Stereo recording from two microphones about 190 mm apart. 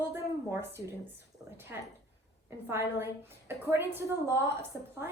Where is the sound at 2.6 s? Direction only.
15° right (ahead or behind).